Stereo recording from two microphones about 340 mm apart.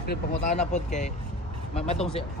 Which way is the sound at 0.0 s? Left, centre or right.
Left.